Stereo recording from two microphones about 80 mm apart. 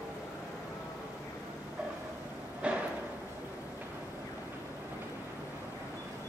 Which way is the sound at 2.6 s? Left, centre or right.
Centre.